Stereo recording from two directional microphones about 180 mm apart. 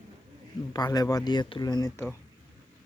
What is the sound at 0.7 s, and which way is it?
Speech, 20° left (ahead or behind).